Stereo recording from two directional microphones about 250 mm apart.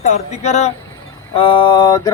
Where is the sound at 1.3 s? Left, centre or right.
Centre.